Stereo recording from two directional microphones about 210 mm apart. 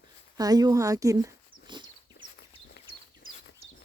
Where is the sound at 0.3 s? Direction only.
20° right (ahead or behind).